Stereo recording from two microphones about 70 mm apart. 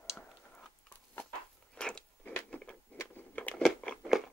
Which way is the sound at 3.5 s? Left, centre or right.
Centre.